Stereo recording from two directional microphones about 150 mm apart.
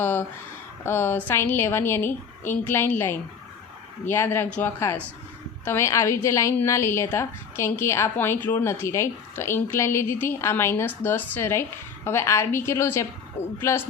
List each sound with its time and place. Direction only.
0.0 s a woman's voice: 10° left (ahead or behind)